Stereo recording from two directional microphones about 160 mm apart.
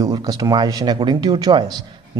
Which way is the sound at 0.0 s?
25° right (ahead or behind).